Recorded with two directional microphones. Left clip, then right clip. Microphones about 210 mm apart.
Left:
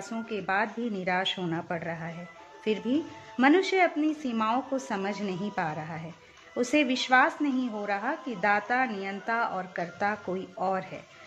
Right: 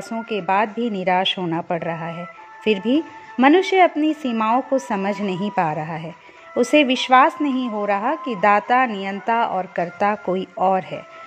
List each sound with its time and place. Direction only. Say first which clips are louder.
0.3 s a woman's voice: right 9 dB; 35° right (ahead or behind)